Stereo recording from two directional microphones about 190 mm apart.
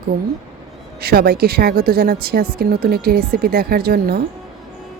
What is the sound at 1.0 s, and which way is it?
Speech, 55° right (ahead or behind).